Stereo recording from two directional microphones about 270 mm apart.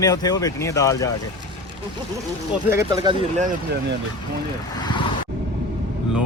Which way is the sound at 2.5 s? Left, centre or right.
Centre.